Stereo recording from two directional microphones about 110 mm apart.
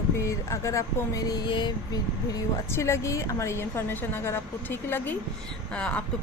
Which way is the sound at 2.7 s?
25° left (ahead or behind).